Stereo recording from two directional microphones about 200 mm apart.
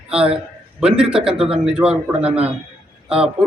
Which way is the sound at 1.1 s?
5° right (ahead or behind).